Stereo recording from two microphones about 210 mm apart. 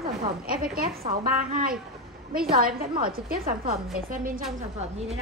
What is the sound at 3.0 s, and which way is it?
A woman's voice, 45° right (ahead or behind).